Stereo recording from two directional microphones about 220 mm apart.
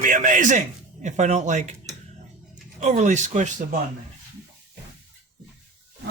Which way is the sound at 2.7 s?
35° right (ahead or behind).